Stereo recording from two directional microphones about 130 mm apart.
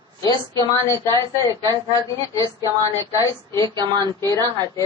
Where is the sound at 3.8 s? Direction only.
35° right (ahead or behind).